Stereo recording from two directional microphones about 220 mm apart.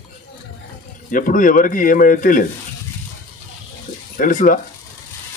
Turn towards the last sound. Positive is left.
turn(degrees=40)  # may be behind; listen again after turning